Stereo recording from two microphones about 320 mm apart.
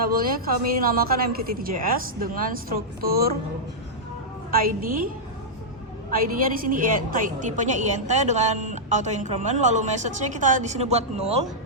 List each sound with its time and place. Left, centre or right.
0.0 s a woman's voice: right
4.5 s a woman's voice: right
6.1 s a woman's voice: right